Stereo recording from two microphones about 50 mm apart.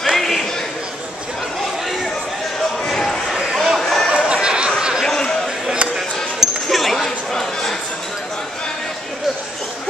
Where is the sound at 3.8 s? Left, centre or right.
Centre.